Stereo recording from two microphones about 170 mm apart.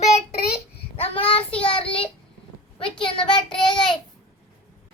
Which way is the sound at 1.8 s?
30° left (ahead or behind).